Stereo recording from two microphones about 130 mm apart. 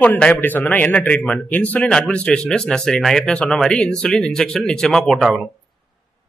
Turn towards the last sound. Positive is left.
turn(degrees=0)  # may be behind; listen again after turning